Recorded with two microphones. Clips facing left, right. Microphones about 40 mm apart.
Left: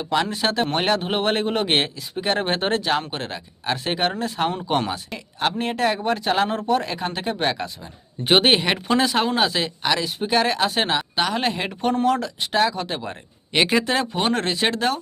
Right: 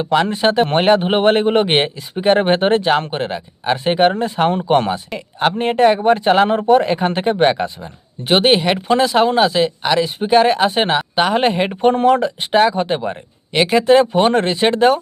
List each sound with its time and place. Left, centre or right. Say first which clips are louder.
0.0 s speech: right 7 dB; right
8.2 s speech: right 4 dB; centre
11.3 s speech: right 8 dB; right
13.5 s speech: right 8 dB; centre; by 15.0 s right